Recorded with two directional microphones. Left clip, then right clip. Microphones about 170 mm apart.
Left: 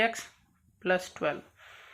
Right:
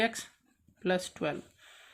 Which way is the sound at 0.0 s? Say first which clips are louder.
Left 3 dB; 40° right (ahead or behind).